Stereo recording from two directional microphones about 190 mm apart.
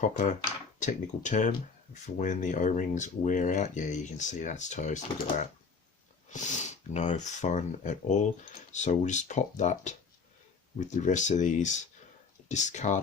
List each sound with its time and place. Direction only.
0.0 s speech: 40° left (ahead or behind)
6.3 s speech: 40° left (ahead or behind)